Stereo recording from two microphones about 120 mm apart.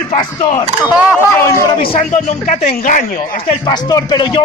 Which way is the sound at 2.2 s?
75° left (ahead or behind).